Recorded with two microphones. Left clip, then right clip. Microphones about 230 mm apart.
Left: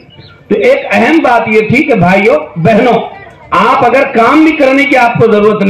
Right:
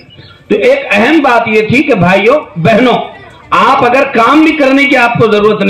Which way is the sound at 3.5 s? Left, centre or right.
Right.